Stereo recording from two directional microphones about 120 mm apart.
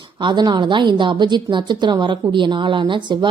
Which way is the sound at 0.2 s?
40° right (ahead or behind).